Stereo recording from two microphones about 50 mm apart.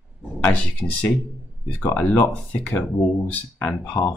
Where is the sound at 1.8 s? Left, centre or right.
Left.